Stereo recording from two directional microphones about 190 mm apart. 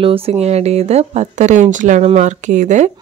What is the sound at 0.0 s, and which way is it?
A woman's voice, 30° right (ahead or behind).